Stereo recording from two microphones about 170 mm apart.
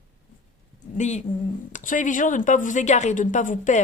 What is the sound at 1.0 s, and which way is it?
A woman's voice, 45° left (ahead or behind).